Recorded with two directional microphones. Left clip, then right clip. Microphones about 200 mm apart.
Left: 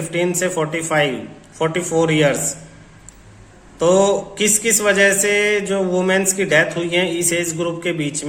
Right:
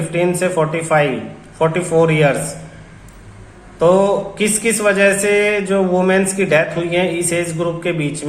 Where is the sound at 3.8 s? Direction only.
25° left (ahead or behind).